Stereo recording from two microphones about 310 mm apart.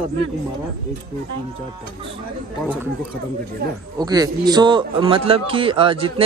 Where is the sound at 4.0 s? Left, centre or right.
Centre.